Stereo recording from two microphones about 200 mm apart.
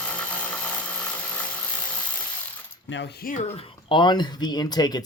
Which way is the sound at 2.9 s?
60° left (ahead or behind).